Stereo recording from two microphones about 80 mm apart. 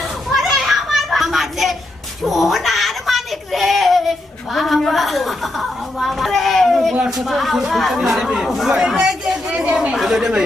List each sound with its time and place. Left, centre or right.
0.3 s children playing: centre
2.2 s a sound: centre
6.9 s speech: centre